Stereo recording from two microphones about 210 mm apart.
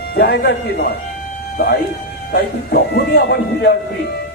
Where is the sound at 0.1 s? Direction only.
45° left (ahead or behind).